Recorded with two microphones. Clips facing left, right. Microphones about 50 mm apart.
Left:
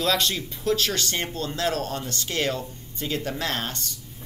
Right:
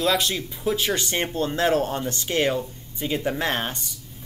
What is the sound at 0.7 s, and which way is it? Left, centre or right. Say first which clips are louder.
Speech: even; centre.